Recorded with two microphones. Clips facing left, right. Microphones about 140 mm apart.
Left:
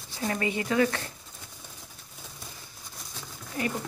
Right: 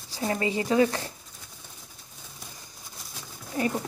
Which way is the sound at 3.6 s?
25° right (ahead or behind).